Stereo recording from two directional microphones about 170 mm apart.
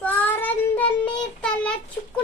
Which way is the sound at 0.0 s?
10° left (ahead or behind).